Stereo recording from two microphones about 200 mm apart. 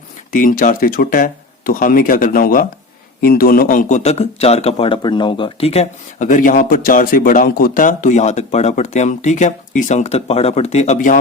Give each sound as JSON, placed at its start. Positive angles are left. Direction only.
{"t": 0.3, "sound": "a man's voice", "side_deg": 40}